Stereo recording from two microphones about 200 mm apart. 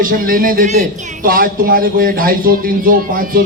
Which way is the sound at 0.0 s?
45° right (ahead or behind).